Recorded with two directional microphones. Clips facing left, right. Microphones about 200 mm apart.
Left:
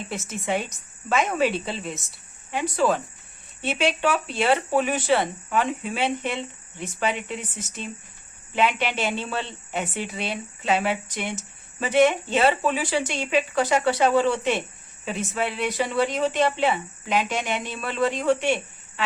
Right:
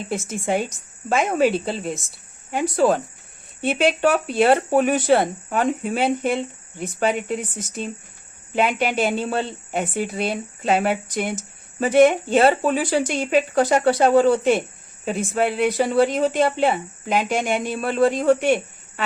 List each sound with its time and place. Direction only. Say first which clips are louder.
0.1 s speech: right 4 dB; 50° right (ahead or behind)
0.7 s a woman's voice: right 3 dB; 30° right (ahead or behind)
1.5 s speech: right 6 dB; 40° right (ahead or behind)
15.4 s speech: right 7 dB; 45° right (ahead or behind)